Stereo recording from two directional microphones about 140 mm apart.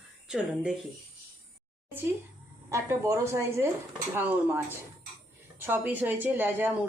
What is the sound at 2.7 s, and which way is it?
A woman's voice, 20° right (ahead or behind).